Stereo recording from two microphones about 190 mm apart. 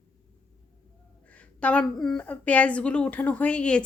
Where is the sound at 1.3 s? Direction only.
5° left (ahead or behind).